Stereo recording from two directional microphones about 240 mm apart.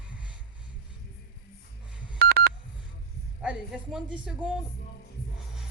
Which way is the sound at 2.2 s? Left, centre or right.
Right.